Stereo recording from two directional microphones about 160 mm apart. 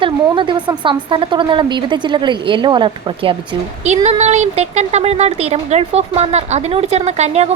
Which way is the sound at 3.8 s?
45° right (ahead or behind).